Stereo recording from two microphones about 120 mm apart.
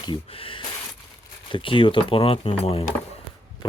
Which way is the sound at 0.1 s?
45° left (ahead or behind).